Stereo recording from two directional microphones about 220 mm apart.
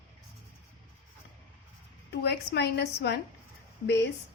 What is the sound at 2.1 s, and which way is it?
A woman's voice, 50° left (ahead or behind).